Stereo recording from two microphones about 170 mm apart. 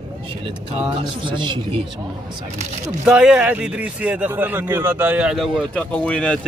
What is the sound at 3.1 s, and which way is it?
A man's voice, 5° right (ahead or behind).